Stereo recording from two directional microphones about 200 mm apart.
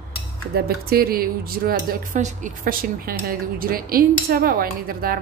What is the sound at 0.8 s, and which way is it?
Speech, 50° right (ahead or behind).